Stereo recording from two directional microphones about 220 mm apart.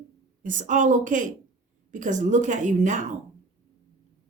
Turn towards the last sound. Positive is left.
turn(degrees=-35)  # may be behind; listen again after turning